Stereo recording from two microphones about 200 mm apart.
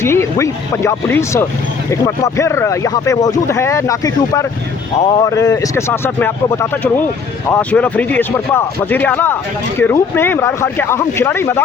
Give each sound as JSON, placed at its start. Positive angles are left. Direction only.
{"t": 0.0, "sound": "speech", "side_deg": 15}